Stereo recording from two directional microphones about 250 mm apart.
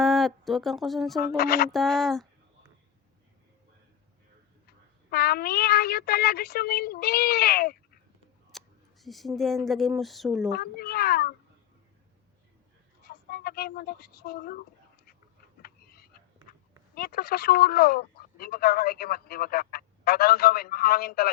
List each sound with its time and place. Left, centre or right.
0.0 s speech: centre
1.4 s speech: left
1.7 s speech: centre
5.1 s speech: left
8.5 s a sound: centre
9.6 s speech: centre
10.5 s speech: left
13.1 s speech: left
15.6 s a sound: left
16.9 s speech: left